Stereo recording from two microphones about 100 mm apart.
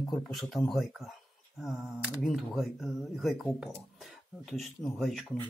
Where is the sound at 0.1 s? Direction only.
Centre (ahead or behind).